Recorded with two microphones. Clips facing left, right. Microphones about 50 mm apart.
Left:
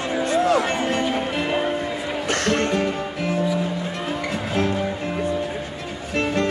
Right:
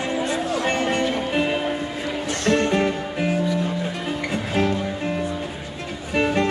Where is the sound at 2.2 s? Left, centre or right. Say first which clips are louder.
Right 1 dB; left.